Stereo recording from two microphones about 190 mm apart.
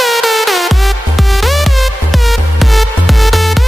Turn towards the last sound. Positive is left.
turn(degrees=0)  # may be behind; listen again after turning